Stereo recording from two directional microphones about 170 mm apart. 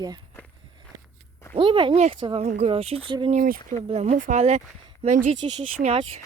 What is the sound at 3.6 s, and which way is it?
Speech, 40° right (ahead or behind).